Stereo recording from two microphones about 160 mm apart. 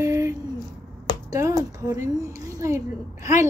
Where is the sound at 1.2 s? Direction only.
20° right (ahead or behind).